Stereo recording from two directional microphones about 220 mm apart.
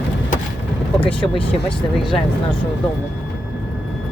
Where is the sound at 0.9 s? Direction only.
5° left (ahead or behind).